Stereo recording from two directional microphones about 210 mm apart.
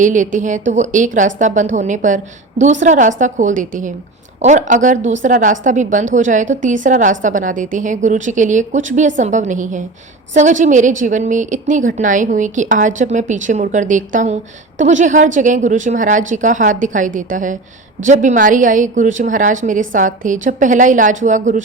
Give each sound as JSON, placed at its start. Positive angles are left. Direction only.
{"t": 0.0, "sound": "a woman's voice", "side_deg": -35}